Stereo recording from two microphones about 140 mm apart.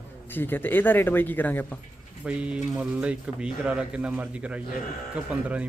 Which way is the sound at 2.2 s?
10° right (ahead or behind).